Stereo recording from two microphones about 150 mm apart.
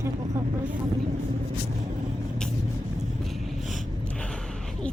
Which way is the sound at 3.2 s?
Centre (ahead or behind).